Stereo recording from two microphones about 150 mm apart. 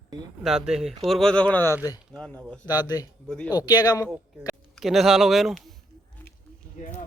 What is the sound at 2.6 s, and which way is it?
Speech, 25° left (ahead or behind).